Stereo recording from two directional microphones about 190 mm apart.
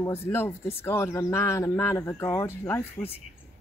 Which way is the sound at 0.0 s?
15° left (ahead or behind).